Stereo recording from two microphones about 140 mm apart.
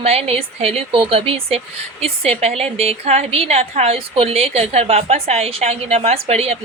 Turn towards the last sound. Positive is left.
turn(degrees=-45)  # may be behind; listen again after turning